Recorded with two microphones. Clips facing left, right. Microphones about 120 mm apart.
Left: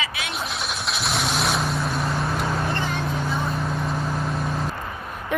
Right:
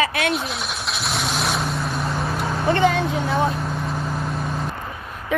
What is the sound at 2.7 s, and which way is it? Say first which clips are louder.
Vehicle: right 8 dB; 75° right (ahead or behind).